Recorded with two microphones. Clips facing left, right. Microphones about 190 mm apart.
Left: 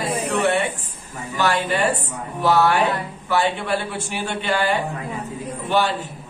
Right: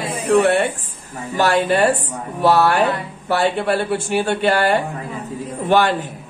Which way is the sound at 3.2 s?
60° right (ahead or behind).